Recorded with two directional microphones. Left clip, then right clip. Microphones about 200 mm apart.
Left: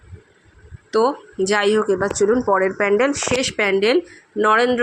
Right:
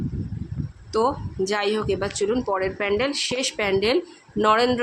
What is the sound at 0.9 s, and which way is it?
Speech, 15° left (ahead or behind).